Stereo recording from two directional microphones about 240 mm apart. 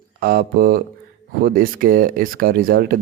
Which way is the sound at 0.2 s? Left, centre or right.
Right.